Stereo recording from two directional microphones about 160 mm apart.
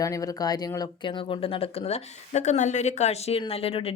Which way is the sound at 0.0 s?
20° left (ahead or behind).